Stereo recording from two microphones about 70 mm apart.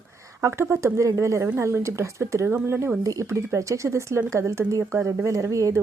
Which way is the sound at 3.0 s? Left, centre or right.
Right.